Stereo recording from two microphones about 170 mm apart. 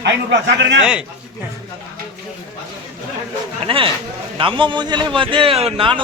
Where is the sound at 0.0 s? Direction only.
90° right.